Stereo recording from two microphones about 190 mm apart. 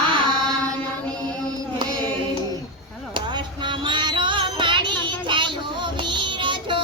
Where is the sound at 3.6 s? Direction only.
25° right (ahead or behind).